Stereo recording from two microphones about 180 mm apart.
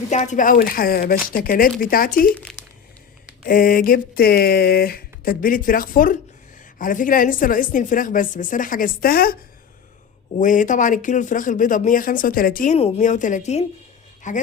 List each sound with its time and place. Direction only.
0.1 s speech: 40° left (ahead or behind)
3.4 s speech: 50° left (ahead or behind)
10.4 s speech: 45° left (ahead or behind)
12.7 s a woman's voice: 40° left (ahead or behind)